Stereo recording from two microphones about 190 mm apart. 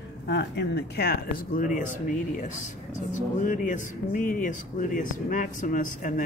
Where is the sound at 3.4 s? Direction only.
40° left (ahead or behind).